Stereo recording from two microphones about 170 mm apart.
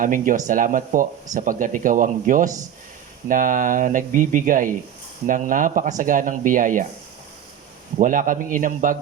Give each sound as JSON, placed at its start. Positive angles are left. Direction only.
{"t": 0.0, "sound": "speech", "side_deg": -50}
{"t": 7.9, "sound": "speech", "side_deg": -50}